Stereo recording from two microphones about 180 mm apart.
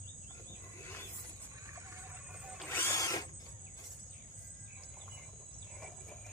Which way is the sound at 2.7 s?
15° left (ahead or behind).